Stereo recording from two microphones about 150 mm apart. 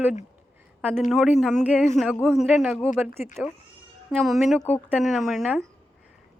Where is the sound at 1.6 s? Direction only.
10° right (ahead or behind).